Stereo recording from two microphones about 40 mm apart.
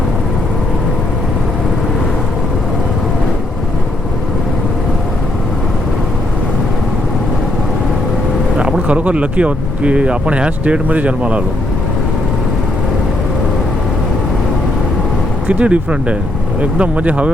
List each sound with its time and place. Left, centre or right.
8.9 s speech: right
15.4 s speech: right